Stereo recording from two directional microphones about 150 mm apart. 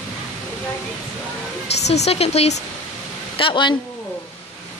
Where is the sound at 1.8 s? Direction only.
45° left (ahead or behind).